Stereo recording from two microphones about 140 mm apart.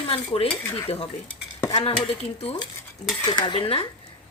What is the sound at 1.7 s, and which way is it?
Dishes, 45° left (ahead or behind).